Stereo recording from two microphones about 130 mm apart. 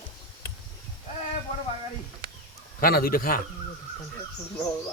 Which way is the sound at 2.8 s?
90° left.